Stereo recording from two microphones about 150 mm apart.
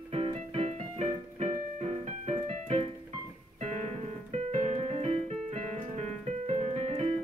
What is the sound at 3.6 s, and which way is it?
Piano, 45° right (ahead or behind).